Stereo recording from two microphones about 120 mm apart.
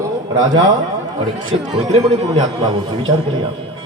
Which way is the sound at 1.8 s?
55° right (ahead or behind).